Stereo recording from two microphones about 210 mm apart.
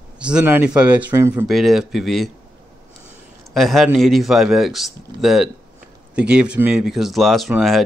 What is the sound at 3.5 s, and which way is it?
Speech, centre (ahead or behind).